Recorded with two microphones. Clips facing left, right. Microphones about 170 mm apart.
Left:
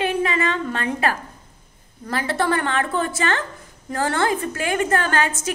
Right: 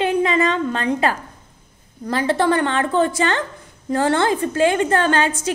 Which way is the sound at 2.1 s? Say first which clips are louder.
Right 4 dB; 20° right (ahead or behind).